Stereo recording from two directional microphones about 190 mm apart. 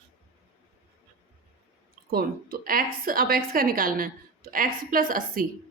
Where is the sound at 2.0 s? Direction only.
50° right (ahead or behind).